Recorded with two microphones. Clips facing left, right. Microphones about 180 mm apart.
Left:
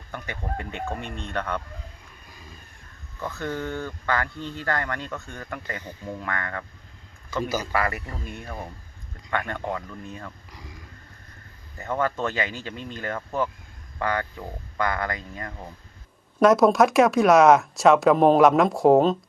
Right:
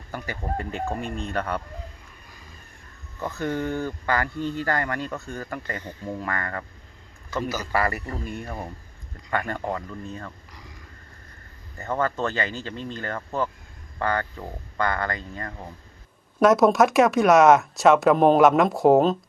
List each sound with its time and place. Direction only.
0.1 s speech: centre (ahead or behind)
0.9 s speech: 40° right (ahead or behind)
1.3 s speech: 10° right (ahead or behind)
3.2 s speech: 10° right (ahead or behind)
7.7 s speech: centre (ahead or behind)
10.1 s speech: 5° left (ahead or behind)
11.8 s speech: 5° left (ahead or behind)
16.4 s speech: centre (ahead or behind)